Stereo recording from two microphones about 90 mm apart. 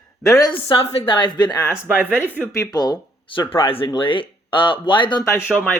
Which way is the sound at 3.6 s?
90° left.